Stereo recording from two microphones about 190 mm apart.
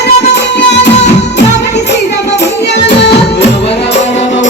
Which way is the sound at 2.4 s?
65° left (ahead or behind).